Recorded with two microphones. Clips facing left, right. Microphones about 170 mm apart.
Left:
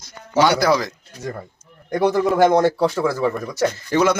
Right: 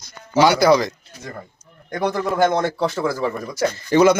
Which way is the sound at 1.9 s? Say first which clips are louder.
Left 4 dB; 10° left (ahead or behind).